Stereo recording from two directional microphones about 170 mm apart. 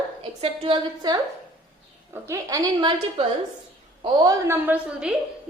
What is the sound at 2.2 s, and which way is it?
Speech, 20° right (ahead or behind).